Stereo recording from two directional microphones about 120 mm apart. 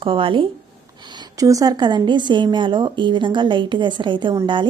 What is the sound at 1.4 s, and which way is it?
A woman's voice, 30° right (ahead or behind).